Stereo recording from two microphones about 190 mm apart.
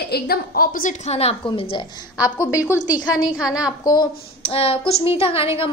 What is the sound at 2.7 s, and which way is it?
A woman's voice, 10° right (ahead or behind).